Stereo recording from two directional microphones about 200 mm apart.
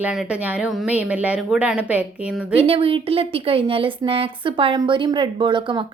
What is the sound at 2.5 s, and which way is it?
A woman's voice, 30° right (ahead or behind).